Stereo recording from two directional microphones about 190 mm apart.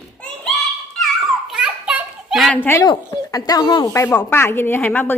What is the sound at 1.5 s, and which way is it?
Children playing, 5° right (ahead or behind).